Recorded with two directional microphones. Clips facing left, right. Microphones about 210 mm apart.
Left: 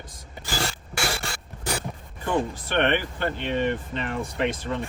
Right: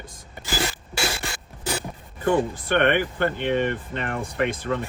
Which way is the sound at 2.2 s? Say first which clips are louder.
Right 4 dB; 50° right (ahead or behind).